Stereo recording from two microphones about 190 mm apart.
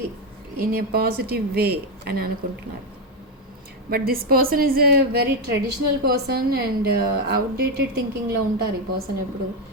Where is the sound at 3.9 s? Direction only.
50° right (ahead or behind).